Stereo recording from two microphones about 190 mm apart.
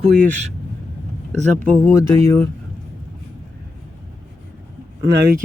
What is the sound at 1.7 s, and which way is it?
Speech, 15° left (ahead or behind).